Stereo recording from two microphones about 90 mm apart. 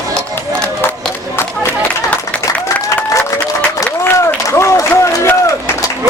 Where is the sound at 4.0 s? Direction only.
30° left (ahead or behind).